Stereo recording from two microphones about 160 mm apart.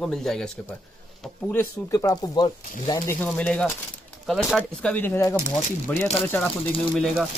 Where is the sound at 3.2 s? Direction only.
10° left (ahead or behind).